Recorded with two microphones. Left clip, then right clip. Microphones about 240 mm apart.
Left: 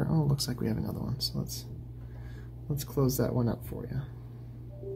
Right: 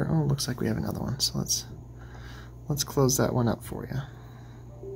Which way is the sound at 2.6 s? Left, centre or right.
Right.